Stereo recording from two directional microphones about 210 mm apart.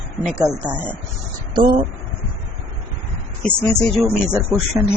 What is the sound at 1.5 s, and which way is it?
Speech, 20° right (ahead or behind).